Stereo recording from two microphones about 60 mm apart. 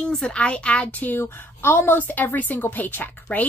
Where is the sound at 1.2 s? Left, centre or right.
Left.